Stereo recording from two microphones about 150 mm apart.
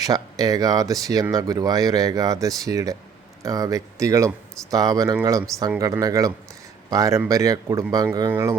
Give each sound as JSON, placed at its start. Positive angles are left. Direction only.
{"t": 0.0, "sound": "speech", "side_deg": -25}